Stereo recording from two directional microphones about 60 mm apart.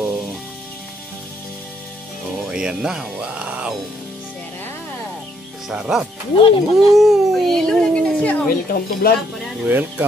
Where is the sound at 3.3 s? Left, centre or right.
Right.